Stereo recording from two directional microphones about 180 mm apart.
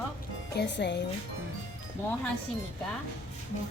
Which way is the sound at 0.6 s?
75° left (ahead or behind).